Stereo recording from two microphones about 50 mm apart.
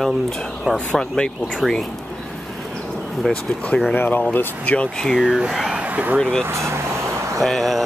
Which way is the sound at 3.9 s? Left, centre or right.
Left.